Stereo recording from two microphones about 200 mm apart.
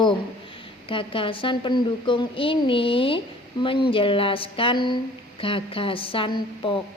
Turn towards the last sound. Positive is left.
turn(degrees=25)  # may be behind; listen again after turning